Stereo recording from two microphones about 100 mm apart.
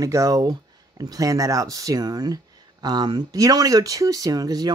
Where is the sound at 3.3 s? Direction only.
35° right (ahead or behind).